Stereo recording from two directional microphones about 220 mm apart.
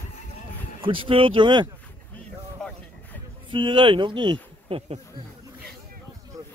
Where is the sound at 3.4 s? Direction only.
20° right (ahead or behind).